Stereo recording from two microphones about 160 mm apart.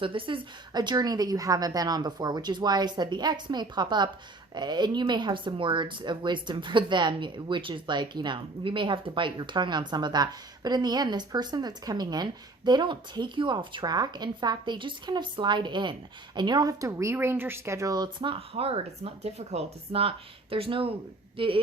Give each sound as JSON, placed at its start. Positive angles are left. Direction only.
{"t": 0.0, "sound": "speech", "side_deg": -35}